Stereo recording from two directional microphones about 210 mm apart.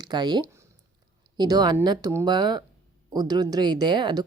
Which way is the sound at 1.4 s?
20° right (ahead or behind).